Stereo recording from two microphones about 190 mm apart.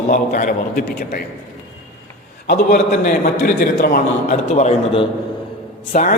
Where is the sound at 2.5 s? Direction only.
45° left (ahead or behind).